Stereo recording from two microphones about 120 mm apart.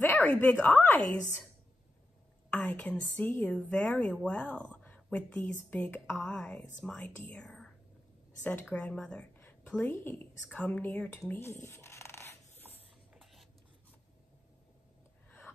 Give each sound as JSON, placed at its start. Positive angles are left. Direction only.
{"t": 0.0, "sound": "a sound", "side_deg": 15}
{"t": 0.3, "sound": "a woman's voice", "side_deg": 10}
{"t": 2.5, "sound": "a woman's voice", "side_deg": 10}
{"t": 8.7, "sound": "a woman's voice", "side_deg": 10}
{"t": 13.1, "sound": "writing", "side_deg": 0}